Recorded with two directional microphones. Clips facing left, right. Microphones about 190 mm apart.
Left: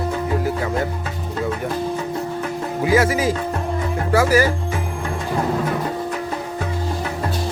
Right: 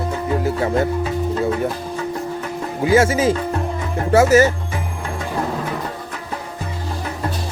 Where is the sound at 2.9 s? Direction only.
25° right (ahead or behind).